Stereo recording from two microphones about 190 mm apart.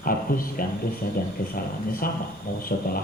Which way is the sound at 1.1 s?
50° left (ahead or behind).